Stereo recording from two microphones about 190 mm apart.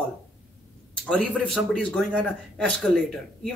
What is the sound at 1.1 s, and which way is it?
Speech, 5° left (ahead or behind).